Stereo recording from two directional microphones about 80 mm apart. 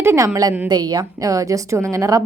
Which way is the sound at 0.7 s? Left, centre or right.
Right.